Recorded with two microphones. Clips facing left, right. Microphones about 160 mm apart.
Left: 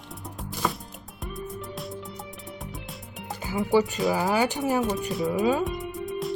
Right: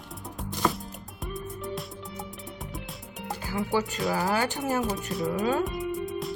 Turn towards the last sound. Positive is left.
turn(degrees=0)  # may be behind; listen again after turning